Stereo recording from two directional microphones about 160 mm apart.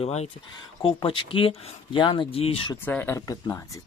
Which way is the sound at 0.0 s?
40° left (ahead or behind).